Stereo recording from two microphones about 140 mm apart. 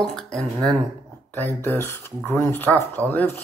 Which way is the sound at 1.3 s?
15° left (ahead or behind).